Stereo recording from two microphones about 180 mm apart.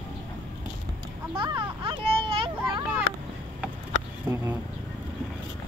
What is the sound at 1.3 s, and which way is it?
Children playing, 25° right (ahead or behind).